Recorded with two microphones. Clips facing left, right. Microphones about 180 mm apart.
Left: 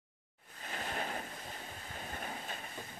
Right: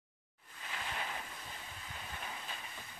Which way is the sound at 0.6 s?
45° left (ahead or behind).